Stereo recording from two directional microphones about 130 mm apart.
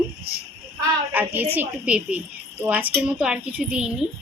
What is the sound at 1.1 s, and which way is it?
A child's voice, 15° right (ahead or behind).